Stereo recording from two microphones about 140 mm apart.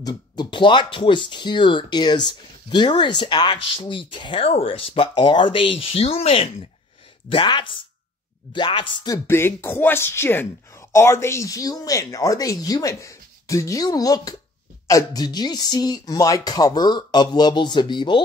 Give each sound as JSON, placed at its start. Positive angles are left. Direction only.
{"t": 0.0, "sound": "speech", "side_deg": 35}
{"t": 9.3, "sound": "speech", "side_deg": 15}